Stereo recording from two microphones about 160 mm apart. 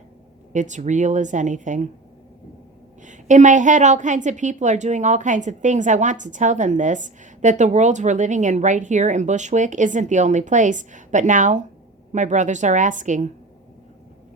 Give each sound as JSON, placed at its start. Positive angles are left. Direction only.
{"t": 0.5, "sound": "a woman's voice", "side_deg": -50}
{"t": 3.0, "sound": "a woman's voice", "side_deg": -50}